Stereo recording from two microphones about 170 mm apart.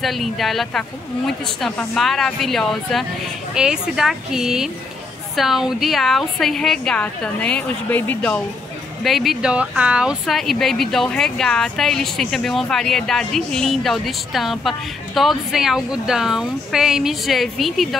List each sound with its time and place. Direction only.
0.0 s speech: centre (ahead or behind)